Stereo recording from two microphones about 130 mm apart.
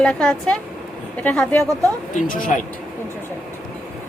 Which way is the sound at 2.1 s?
85° left.